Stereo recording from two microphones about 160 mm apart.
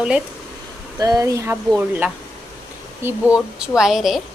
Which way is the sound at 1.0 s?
20° right (ahead or behind).